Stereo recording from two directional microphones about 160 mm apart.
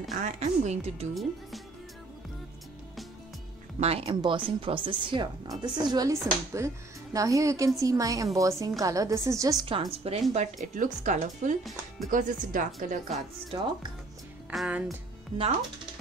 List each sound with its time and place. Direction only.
0.1 s speech: 50° right (ahead or behind)
3.8 s speech: 40° right (ahead or behind)
14.5 s music: 5° right (ahead or behind)
15.3 s speech: 25° right (ahead or behind)